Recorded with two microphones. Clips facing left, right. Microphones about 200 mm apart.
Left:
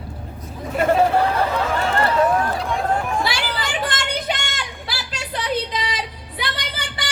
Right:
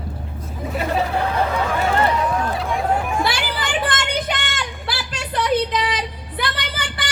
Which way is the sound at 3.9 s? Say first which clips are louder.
Right 1 dB; 50° right (ahead or behind).